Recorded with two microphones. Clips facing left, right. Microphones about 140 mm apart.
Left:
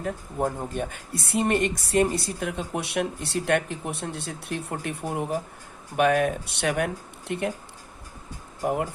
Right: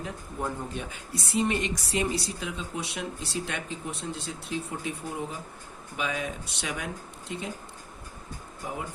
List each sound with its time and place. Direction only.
0.0 s speech: 50° left (ahead or behind); by 7.5 s 65° left (ahead or behind)
8.6 s speech: 60° left (ahead or behind)